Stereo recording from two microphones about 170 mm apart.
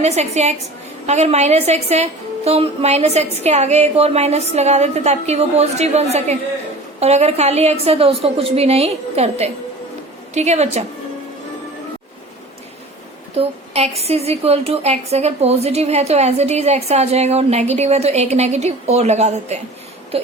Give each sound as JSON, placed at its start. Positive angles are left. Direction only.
{"t": 0.0, "sound": "a woman's voice", "side_deg": -40}
{"t": 13.3, "sound": "a woman's voice", "side_deg": -35}